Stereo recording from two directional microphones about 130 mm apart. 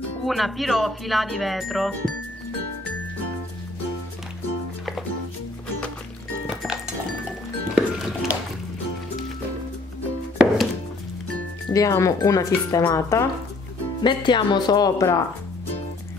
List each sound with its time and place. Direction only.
0.2 s speech: centre (ahead or behind)
7.7 s music: 5° right (ahead or behind)
10.3 s music: 10° right (ahead or behind)
11.7 s speech: 25° left (ahead or behind)
14.0 s speech: 35° left (ahead or behind)